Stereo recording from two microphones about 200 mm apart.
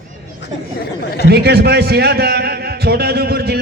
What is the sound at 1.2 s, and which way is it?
A man's voice, 55° right (ahead or behind).